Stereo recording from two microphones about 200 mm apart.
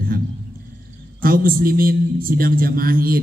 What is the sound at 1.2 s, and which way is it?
A man's voice, 45° right (ahead or behind).